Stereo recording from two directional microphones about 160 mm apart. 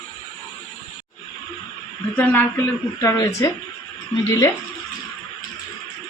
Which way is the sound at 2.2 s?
10° left (ahead or behind).